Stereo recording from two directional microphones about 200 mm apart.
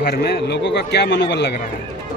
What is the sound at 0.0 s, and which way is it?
A man's voice, 50° left (ahead or behind).